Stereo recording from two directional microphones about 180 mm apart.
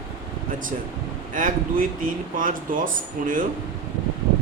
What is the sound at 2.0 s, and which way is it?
A man's voice, 50° right (ahead or behind).